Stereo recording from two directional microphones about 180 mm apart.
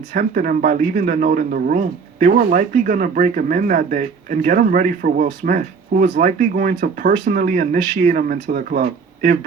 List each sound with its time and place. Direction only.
0.1 s speech: 50° right (ahead or behind)